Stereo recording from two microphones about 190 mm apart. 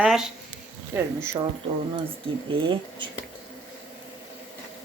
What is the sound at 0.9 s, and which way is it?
Speech, 15° right (ahead or behind).